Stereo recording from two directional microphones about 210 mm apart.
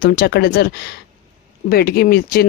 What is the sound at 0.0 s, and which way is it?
Speech, 45° left (ahead or behind).